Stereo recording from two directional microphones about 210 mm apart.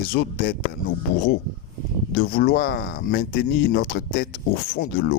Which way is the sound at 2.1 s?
45° left (ahead or behind).